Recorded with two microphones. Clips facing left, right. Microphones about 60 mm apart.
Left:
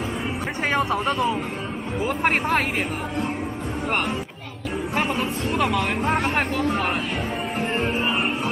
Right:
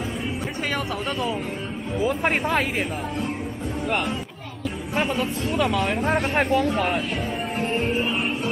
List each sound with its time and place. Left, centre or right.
2.2 s speech: centre
5.0 s speech: left
5.9 s speech: centre
6.5 s speech: left
7.6 s speech: left